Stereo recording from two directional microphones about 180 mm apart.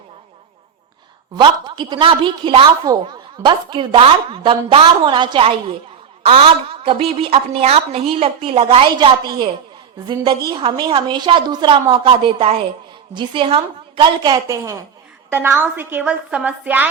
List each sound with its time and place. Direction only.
1.4 s a woman's voice: 25° right (ahead or behind)
10.5 s a woman's voice: 25° right (ahead or behind); by 16.9 s 10° right (ahead or behind)